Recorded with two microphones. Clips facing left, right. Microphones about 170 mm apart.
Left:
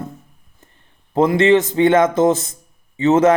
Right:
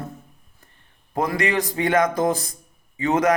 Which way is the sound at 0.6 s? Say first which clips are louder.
Left 6 dB; 25° left (ahead or behind).